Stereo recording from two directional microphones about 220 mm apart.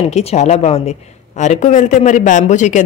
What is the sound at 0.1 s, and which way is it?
Speech, 30° left (ahead or behind).